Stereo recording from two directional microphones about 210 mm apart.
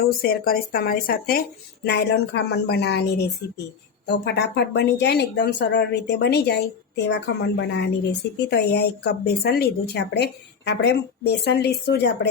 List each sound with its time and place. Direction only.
0.2 s speech: 45° left (ahead or behind)